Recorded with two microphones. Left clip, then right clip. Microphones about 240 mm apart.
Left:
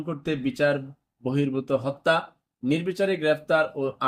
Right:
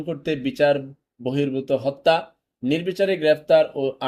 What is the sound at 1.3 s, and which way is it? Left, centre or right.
Speech, left.